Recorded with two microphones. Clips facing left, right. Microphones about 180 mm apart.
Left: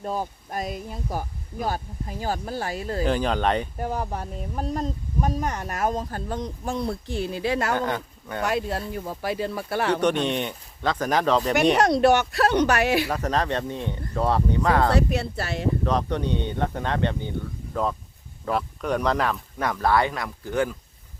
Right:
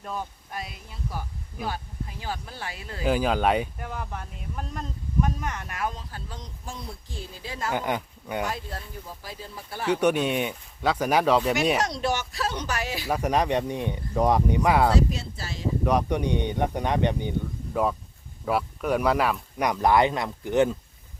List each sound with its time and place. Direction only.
0.0 s speech: 35° left (ahead or behind)
3.0 s speech: 5° right (ahead or behind)
3.8 s speech: 35° left (ahead or behind); by 7.8 s 70° left (ahead or behind)
7.8 s speech: 15° right (ahead or behind)
8.4 s speech: 70° left (ahead or behind)
10.0 s speech: 10° right (ahead or behind)
11.8 s speech: 60° left (ahead or behind)
13.1 s speech: 10° right (ahead or behind)
14.9 s speech: 65° left (ahead or behind)
15.8 s speech: 10° right (ahead or behind)
18.4 s speech: 5° right (ahead or behind)